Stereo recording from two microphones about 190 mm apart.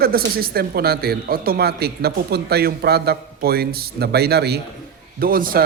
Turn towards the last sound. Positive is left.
turn(degrees=-50)  # may be behind; listen again after turning